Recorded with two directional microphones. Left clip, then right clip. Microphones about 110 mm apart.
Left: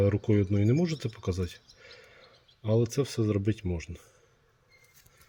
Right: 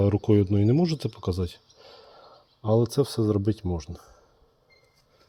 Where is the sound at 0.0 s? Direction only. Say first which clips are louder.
Right 4 dB; 50° right (ahead or behind).